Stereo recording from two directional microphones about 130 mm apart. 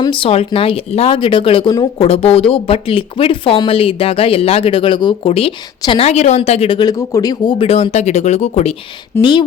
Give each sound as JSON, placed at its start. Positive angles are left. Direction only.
{"t": 0.0, "sound": "speech", "side_deg": 40}
{"t": 2.0, "sound": "a woman's voice", "side_deg": 50}
{"t": 6.1, "sound": "speech", "side_deg": 55}
{"t": 6.7, "sound": "speech", "side_deg": 30}
{"t": 7.6, "sound": "speech", "side_deg": 50}
{"t": 9.1, "sound": "speech", "side_deg": 20}